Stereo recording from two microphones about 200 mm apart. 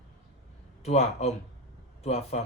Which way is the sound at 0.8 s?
30° left (ahead or behind).